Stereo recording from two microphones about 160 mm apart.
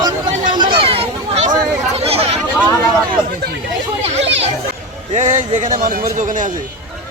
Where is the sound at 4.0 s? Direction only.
40° right (ahead or behind).